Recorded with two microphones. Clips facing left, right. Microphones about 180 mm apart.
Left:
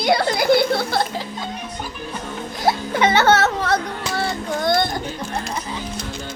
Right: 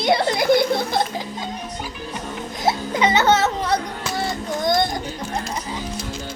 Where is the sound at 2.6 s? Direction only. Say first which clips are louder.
Left 1 dB; 15° right (ahead or behind).